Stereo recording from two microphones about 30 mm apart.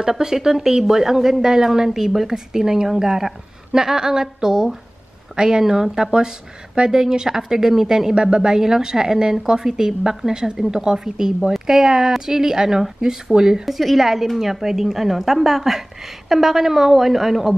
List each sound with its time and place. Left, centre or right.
0.2 s a woman's voice: centre
8.1 s a woman's voice: right
13.7 s a woman's voice: centre